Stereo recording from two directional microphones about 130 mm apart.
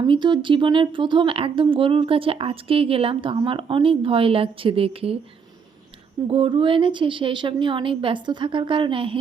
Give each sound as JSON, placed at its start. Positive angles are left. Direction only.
{"t": 0.0, "sound": "speech", "side_deg": -35}
{"t": 6.2, "sound": "a woman's voice", "side_deg": -45}